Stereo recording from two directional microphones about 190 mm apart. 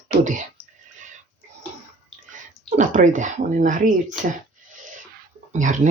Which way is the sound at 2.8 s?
40° right (ahead or behind).